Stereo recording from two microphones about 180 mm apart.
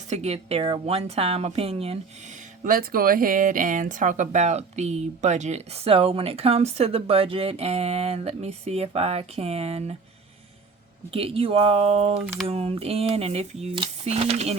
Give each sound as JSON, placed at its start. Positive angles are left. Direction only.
{"t": 0.1, "sound": "speech", "side_deg": -35}
{"t": 2.6, "sound": "speech", "side_deg": -50}
{"t": 11.1, "sound": "speech", "side_deg": -30}